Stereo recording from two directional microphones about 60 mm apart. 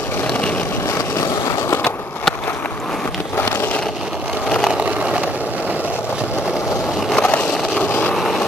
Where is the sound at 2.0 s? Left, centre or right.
Left.